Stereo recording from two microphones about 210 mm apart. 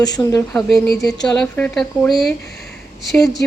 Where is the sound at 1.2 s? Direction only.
5° left (ahead or behind).